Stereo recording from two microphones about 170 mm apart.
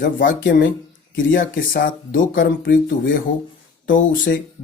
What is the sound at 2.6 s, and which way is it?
Speech, 90° left.